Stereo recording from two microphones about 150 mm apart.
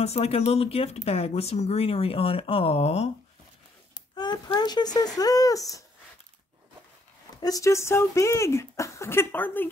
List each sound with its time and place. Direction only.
0.0 s speech: 45° left (ahead or behind)
3.9 s speech: 30° left (ahead or behind)
7.3 s speech: 25° left (ahead or behind)